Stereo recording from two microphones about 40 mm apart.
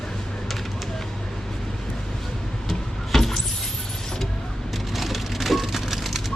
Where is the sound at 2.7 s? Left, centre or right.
Centre.